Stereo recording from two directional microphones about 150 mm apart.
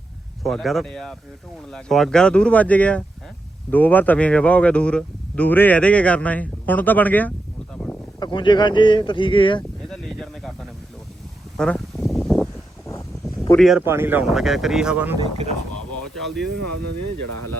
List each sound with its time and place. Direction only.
0.4 s speech: centre (ahead or behind)
8.2 s speech: 30° left (ahead or behind)
9.9 s a sound: 5° left (ahead or behind)
11.5 s a sound: 5° left (ahead or behind)
13.6 s speech: centre (ahead or behind)
13.8 s speech: 15° right (ahead or behind)
14.3 s speech: centre (ahead or behind)
15.2 s speech: 45° right (ahead or behind)
16.1 s speech: centre (ahead or behind)